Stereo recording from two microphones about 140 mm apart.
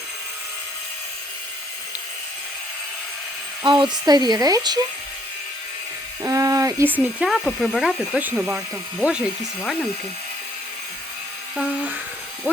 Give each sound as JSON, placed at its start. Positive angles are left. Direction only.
{"t": 3.6, "sound": "speech", "side_deg": -35}
{"t": 6.2, "sound": "speech", "side_deg": -25}
{"t": 8.2, "sound": "speech", "side_deg": -10}
{"t": 11.5, "sound": "electric toothbrush", "side_deg": -10}